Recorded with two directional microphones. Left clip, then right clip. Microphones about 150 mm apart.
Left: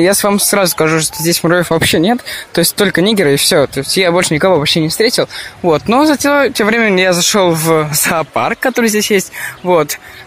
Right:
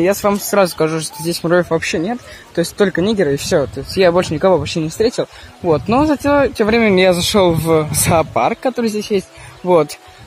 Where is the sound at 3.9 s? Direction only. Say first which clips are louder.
Even; 20° left (ahead or behind).